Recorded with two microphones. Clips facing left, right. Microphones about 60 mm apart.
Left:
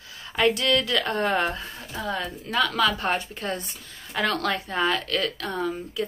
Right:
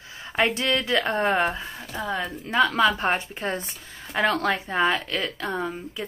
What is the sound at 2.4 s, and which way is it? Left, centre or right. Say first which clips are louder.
A woman's voice: right 3 dB; right.